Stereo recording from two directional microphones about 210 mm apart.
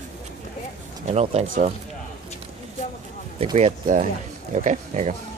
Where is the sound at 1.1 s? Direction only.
30° right (ahead or behind).